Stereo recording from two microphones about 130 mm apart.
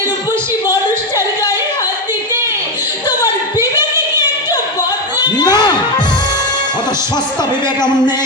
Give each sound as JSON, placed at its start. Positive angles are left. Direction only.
{"t": 0.7, "sound": "a sound", "side_deg": 25}
{"t": 3.6, "sound": "singing", "side_deg": -20}
{"t": 5.2, "sound": "crowd", "side_deg": 35}